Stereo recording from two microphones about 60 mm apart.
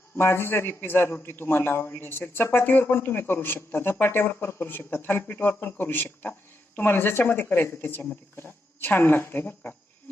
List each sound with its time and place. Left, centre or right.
0.2 s a man's voice: left